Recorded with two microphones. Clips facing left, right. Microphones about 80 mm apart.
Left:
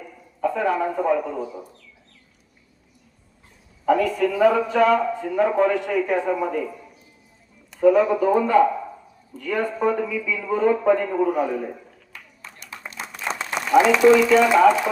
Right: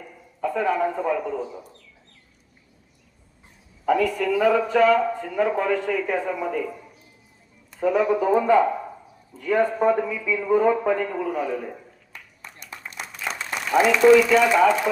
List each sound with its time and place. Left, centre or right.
0.4 s a man's voice: centre
3.8 s a woman's voice: centre
7.8 s a man's voice: centre
11.1 s a man's voice: centre
13.0 s applause: left
14.2 s a man's voice: centre